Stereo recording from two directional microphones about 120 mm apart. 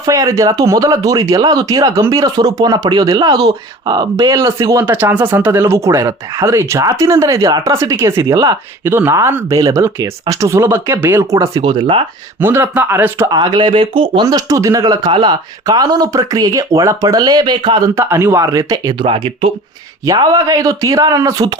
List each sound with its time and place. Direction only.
0.0 s speech: 30° right (ahead or behind)
11.5 s speech: 40° right (ahead or behind)
12.4 s speech: 20° right (ahead or behind)
13.3 s speech: 35° right (ahead or behind)
14.3 s speech: 30° right (ahead or behind)
17.9 s speech: 20° right (ahead or behind)
18.9 s speech: 45° right (ahead or behind)
20.1 s speech: 30° right (ahead or behind)